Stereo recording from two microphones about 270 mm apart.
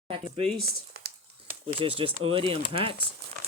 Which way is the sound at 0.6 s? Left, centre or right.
Right.